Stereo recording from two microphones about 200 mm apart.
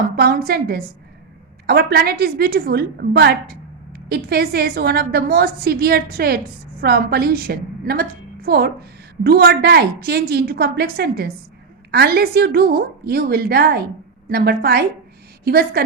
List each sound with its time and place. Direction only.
0.2 s a woman's voice: 50° right (ahead or behind)